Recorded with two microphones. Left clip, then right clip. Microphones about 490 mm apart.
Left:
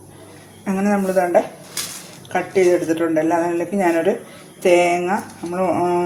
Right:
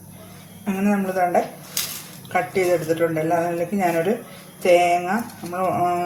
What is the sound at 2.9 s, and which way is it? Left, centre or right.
Speech, right.